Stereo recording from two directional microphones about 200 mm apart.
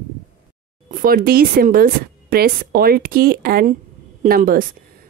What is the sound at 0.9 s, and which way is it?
A woman's voice, 45° right (ahead or behind).